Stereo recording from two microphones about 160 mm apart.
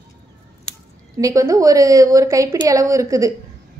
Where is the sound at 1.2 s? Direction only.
20° right (ahead or behind).